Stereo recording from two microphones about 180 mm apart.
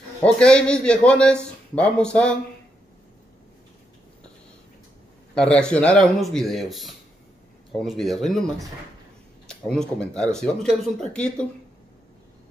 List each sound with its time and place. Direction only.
0.2 s a man's voice: 5° left (ahead or behind)
5.3 s a man's voice: 5° left (ahead or behind)
9.7 s a man's voice: 5° left (ahead or behind)